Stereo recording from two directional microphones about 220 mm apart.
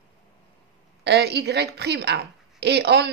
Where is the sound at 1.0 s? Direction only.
50° right (ahead or behind).